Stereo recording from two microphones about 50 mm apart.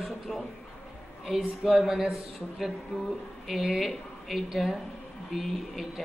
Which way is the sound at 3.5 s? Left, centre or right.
Centre.